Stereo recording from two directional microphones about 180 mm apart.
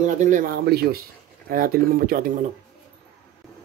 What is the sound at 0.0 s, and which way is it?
Speech, 45° right (ahead or behind).